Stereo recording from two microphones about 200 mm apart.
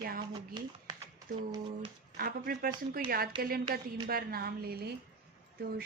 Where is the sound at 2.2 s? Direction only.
50° right (ahead or behind).